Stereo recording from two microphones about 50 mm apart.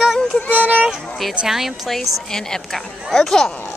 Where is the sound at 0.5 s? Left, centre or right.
Right.